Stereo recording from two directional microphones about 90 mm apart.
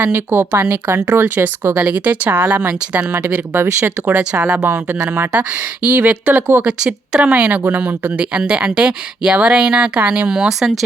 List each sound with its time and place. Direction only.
0.0 s speech: 25° right (ahead or behind); by 10.8 s 5° right (ahead or behind)